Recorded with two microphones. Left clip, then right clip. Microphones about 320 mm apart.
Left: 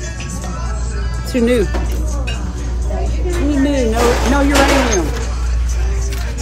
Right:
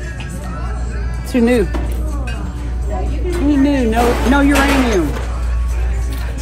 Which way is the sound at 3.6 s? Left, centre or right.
Centre.